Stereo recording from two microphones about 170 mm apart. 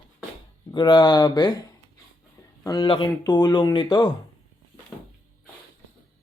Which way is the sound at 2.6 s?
25° left (ahead or behind).